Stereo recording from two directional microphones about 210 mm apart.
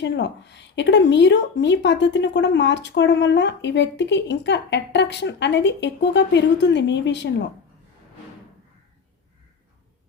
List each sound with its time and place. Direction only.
0.0 s a woman's voice: 55° left (ahead or behind)